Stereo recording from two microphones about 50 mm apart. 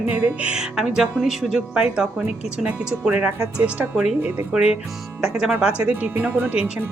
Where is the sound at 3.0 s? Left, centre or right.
Right.